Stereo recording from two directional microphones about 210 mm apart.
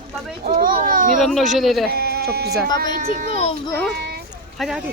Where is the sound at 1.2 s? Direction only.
Centre (ahead or behind).